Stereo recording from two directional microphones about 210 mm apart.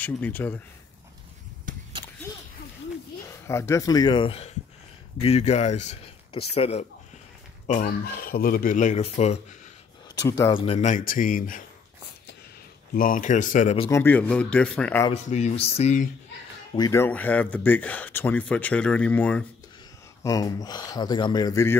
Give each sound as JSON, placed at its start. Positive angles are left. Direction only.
{"t": 0.0, "sound": "speech", "side_deg": 10}
{"t": 3.3, "sound": "speech", "side_deg": 15}
{"t": 12.9, "sound": "speech", "side_deg": 40}
{"t": 13.8, "sound": "speech", "side_deg": 10}
{"t": 15.2, "sound": "speech", "side_deg": 35}
{"t": 16.7, "sound": "speech", "side_deg": 15}
{"t": 20.2, "sound": "speech", "side_deg": 15}